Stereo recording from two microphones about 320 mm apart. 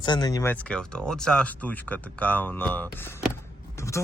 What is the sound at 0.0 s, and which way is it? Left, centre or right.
Speech, centre.